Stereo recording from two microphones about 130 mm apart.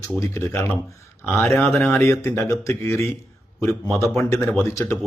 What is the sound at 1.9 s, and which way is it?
Speech, 20° left (ahead or behind).